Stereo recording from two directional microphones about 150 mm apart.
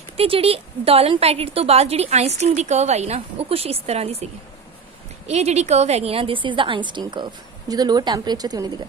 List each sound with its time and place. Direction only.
0.2 s a woman's voice: 40° right (ahead or behind)